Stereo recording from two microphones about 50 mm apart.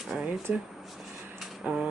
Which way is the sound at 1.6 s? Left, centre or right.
Right.